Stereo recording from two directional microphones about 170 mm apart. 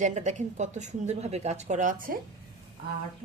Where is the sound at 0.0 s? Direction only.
45° right (ahead or behind).